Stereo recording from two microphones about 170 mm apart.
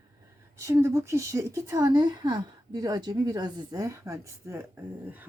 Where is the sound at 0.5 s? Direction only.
15° right (ahead or behind).